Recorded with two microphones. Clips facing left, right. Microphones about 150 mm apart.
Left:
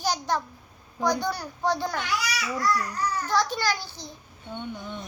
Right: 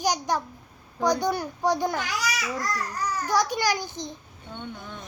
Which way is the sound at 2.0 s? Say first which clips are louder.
Even; 45° right (ahead or behind).